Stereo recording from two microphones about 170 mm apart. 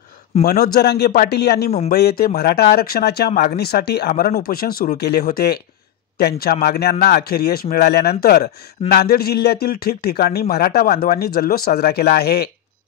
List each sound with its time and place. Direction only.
0.4 s a man's voice: 60° left (ahead or behind)